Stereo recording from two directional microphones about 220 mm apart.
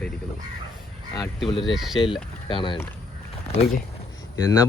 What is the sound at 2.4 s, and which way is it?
Speech, 20° left (ahead or behind).